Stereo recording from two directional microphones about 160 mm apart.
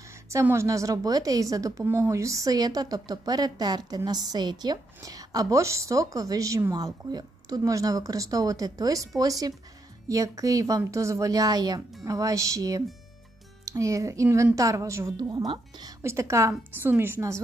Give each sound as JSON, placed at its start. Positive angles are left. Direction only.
{"t": 0.3, "sound": "a woman's voice", "side_deg": -15}